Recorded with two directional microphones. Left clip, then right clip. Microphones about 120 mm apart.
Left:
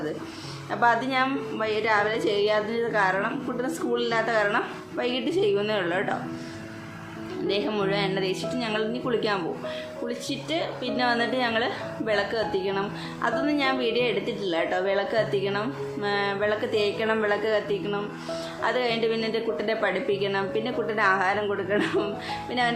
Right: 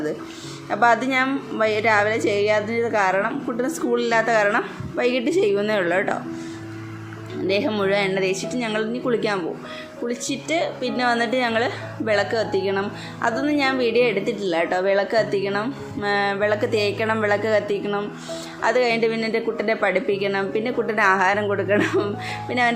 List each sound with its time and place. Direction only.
0.7 s a woman's voice: 40° right (ahead or behind)
7.4 s a woman's voice: 45° right (ahead or behind)